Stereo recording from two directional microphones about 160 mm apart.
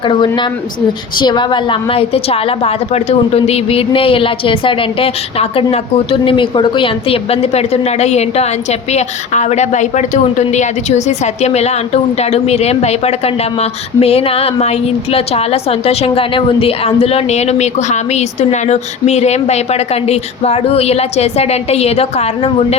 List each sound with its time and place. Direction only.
0.1 s a woman's voice: 30° left (ahead or behind)